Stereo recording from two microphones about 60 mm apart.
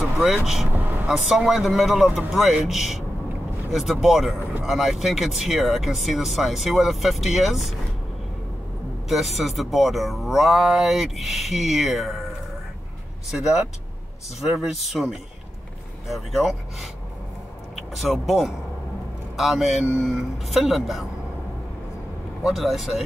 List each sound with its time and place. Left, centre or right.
0.0 s vehicle: centre
0.7 s vehicle: right
1.0 s speech: centre
9.1 s speech: centre
13.3 s speech: centre
22.4 s speech: centre